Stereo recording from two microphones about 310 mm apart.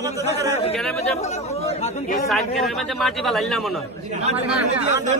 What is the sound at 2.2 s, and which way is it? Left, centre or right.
Speech, centre.